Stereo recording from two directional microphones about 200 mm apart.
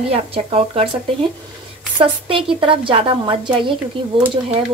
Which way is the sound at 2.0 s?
25° right (ahead or behind).